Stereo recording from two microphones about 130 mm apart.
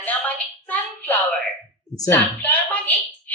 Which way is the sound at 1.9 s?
25° left (ahead or behind).